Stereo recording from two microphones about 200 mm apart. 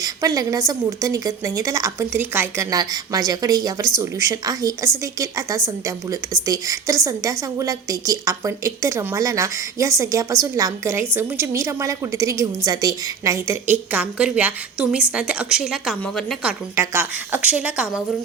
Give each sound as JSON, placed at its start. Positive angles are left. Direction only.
{"t": 0.0, "sound": "a woman's voice", "side_deg": -15}